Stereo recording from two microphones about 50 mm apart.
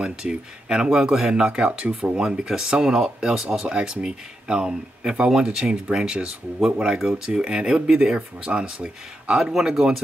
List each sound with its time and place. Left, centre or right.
0.0 s speech: centre